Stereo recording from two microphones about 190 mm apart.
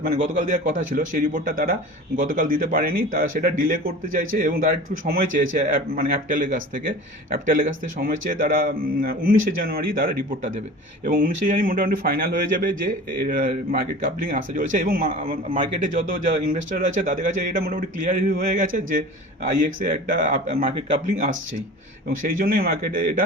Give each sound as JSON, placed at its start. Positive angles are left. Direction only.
{"t": 0.0, "sound": "speech", "side_deg": -50}
{"t": 22.3, "sound": "speech", "side_deg": -50}